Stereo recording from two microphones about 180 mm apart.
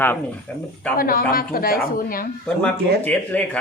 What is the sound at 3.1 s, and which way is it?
Speech, 5° left (ahead or behind).